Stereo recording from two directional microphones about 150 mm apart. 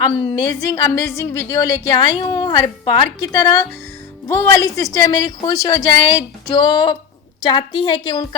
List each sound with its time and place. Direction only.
0.0 s a woman's voice: 30° left (ahead or behind)